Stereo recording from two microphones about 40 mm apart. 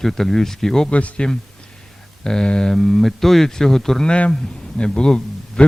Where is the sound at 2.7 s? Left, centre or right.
Centre.